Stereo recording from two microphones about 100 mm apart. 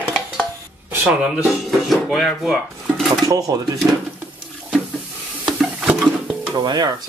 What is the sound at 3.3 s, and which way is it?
Speech, 35° right (ahead or behind).